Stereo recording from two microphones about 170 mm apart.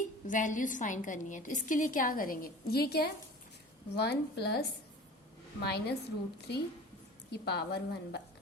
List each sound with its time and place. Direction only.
0.0 s a woman's voice: 50° left (ahead or behind); by 8.2 s 75° left (ahead or behind)